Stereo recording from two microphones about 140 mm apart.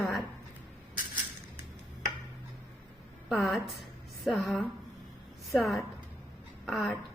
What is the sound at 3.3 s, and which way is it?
A woman's voice, centre (ahead or behind).